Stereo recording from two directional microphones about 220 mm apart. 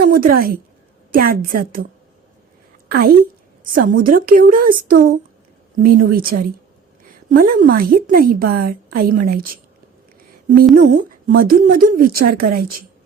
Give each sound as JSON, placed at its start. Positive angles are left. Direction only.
{"t": 0.1, "sound": "a woman's voice", "side_deg": -40}
{"t": 2.9, "sound": "a woman's voice", "side_deg": -45}
{"t": 11.1, "sound": "a woman's voice", "side_deg": -40}